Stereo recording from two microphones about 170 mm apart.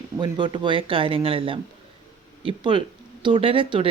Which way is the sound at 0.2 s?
25° right (ahead or behind).